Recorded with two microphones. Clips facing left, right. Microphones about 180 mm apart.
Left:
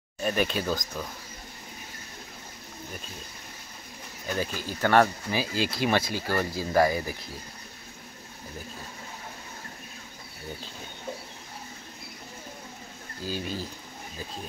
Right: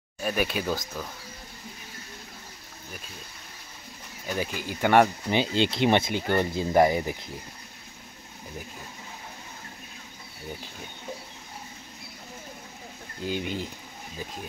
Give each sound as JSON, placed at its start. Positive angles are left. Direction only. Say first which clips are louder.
{"t": 0.2, "sound": "speech", "louder": "left 1 dB", "side_deg": -5}
{"t": 4.3, "sound": "speech", "louder": "even", "side_deg": -15}
{"t": 13.2, "sound": "speech", "louder": "right 3 dB", "side_deg": -20}